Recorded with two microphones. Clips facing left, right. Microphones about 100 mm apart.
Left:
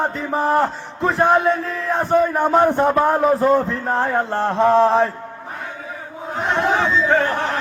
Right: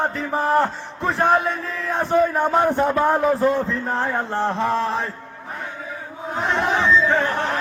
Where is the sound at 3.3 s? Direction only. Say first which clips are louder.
Left 3 dB; 15° left (ahead or behind).